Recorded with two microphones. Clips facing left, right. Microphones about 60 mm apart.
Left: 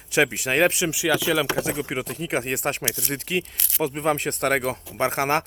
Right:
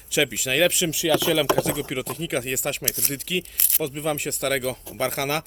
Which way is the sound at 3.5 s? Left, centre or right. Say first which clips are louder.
Even; centre.